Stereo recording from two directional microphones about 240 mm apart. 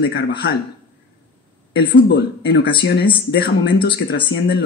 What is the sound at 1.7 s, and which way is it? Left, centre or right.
Speech, left.